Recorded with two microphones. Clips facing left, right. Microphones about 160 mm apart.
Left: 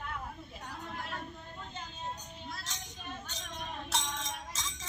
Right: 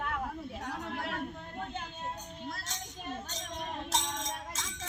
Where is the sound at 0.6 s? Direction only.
75° right (ahead or behind).